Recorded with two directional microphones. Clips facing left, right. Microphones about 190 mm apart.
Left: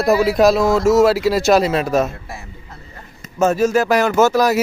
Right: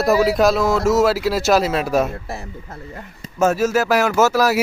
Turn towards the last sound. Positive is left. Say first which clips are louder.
# left 2 dB
turn(degrees=-5)  # may be behind; listen again after turning